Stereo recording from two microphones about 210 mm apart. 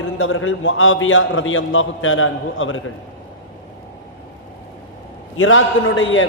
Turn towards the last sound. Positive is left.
turn(degrees=70)  # may be behind; listen again after turning